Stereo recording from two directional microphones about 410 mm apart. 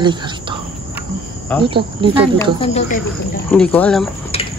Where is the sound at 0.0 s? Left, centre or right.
Centre.